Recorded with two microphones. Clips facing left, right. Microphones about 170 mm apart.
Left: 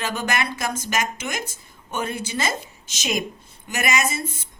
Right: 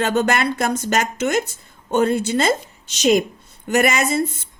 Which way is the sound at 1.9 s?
60° right (ahead or behind).